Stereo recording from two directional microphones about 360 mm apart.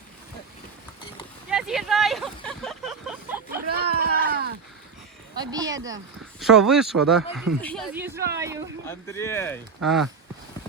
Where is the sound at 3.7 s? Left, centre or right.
Right.